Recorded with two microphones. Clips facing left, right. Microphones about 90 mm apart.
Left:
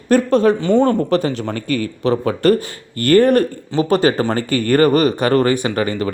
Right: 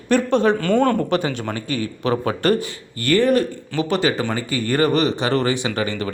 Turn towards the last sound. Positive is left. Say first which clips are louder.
# left 4 dB
turn(degrees=40)  # may be behind; listen again after turning